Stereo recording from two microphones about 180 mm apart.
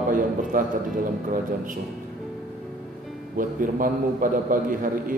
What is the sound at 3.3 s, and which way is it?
A man's voice, 50° right (ahead or behind).